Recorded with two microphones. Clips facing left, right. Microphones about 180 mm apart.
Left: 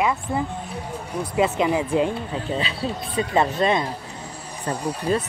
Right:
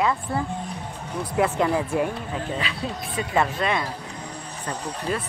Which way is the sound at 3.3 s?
25° left (ahead or behind).